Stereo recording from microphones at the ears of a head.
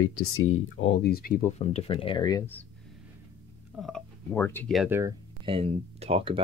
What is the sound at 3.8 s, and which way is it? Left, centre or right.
Speech, left.